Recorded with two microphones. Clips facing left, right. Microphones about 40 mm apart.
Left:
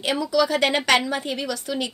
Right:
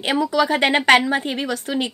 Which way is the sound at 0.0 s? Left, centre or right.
Right.